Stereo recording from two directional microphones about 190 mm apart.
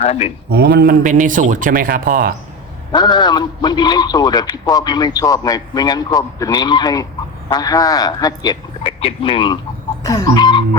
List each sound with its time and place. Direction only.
0.0 s speech: 35° left (ahead or behind)
0.5 s a man's voice: 55° right (ahead or behind)
2.9 s a man's voice: 20° left (ahead or behind)